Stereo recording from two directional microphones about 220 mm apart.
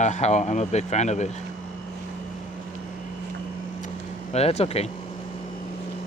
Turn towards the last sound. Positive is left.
turn(degrees=30)  # may be behind; listen again after turning